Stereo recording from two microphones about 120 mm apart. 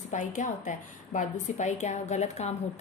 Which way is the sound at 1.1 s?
80° left.